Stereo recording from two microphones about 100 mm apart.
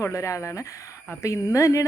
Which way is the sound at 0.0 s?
30° left (ahead or behind).